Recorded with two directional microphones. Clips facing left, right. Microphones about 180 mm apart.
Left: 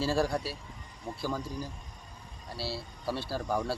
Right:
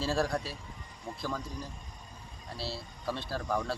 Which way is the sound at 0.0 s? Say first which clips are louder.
Left 2 dB; 5° left (ahead or behind).